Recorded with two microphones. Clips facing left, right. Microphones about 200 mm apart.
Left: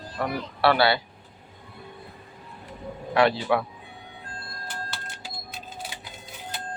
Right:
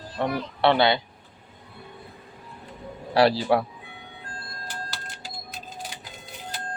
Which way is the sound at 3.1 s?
35° right (ahead or behind).